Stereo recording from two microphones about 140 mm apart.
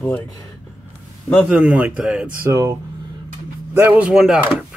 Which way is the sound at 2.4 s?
20° right (ahead or behind).